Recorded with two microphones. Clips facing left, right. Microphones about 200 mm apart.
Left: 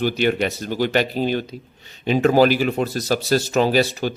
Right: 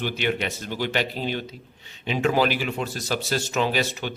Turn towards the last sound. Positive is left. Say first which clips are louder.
# left 7 dB
turn(degrees=40)  # may be behind; listen again after turning